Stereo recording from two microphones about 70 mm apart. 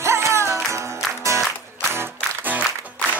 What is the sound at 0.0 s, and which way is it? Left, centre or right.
Music, right.